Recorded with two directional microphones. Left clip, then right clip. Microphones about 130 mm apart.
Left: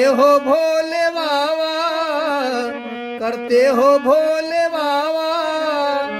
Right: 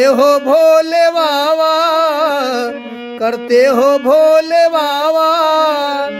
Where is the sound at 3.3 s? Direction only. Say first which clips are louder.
Right 4 dB; 55° right (ahead or behind).